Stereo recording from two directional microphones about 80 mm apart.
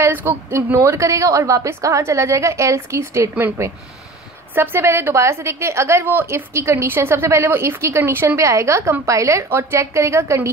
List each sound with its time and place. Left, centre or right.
0.0 s a woman's voice: right